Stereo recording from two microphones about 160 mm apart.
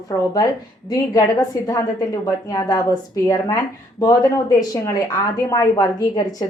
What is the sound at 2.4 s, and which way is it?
Speech, 20° left (ahead or behind).